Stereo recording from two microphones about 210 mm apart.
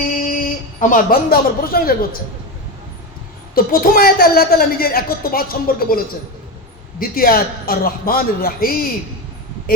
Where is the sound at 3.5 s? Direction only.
45° left (ahead or behind).